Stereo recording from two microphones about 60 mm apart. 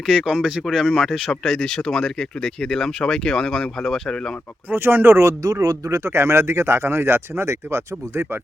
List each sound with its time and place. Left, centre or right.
0.0 s speech: centre
4.7 s speech: right
5.6 s speech: right
6.0 s speech: right